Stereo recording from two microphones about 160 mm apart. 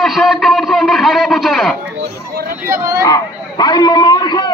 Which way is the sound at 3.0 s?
25° left (ahead or behind).